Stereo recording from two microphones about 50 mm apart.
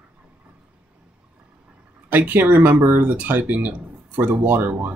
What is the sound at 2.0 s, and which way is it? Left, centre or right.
Speech, right.